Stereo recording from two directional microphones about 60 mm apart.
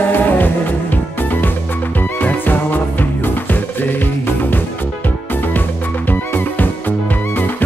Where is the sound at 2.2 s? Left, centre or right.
Left.